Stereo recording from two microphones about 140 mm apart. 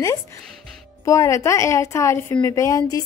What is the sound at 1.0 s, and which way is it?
A woman's voice, 20° left (ahead or behind).